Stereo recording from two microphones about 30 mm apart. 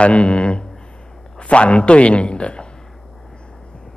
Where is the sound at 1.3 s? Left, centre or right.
Left.